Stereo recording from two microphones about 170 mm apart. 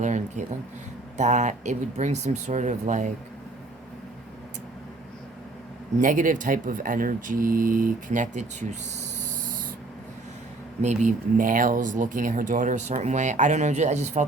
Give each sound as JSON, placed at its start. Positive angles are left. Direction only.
{"t": 0.0, "sound": "a sound", "side_deg": -45}
{"t": 1.1, "sound": "speech", "side_deg": -45}
{"t": 6.0, "sound": "speech", "side_deg": -50}
{"t": 10.8, "sound": "speech", "side_deg": -50}